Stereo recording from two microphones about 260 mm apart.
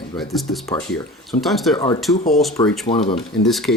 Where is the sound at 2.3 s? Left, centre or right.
Centre.